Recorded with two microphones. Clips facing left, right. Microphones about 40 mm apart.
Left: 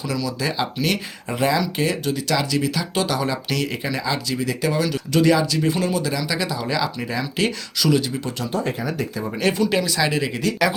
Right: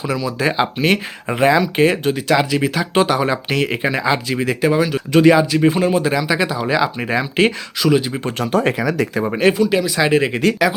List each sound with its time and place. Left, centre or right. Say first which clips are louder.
0.0 s speech: right 5 dB; right
4.7 s speech: right 6 dB; right
8.2 s speech: right 7 dB; right
9.6 s speech: right 4 dB; centre
9.9 s speech: right 6 dB; right